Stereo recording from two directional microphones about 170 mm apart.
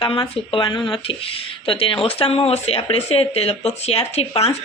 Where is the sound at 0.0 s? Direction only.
30° left (ahead or behind).